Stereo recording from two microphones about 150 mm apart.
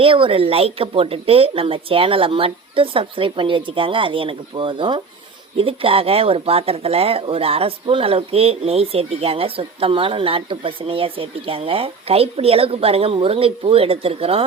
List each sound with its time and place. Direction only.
0.0 s speech: 35° right (ahead or behind)